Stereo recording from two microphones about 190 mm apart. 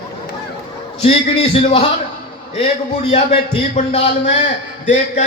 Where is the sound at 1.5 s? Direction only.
30° left (ahead or behind).